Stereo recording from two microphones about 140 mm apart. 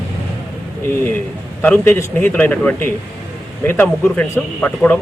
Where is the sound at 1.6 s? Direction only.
15° left (ahead or behind).